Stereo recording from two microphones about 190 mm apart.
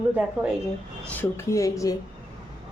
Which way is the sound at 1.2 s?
15° left (ahead or behind).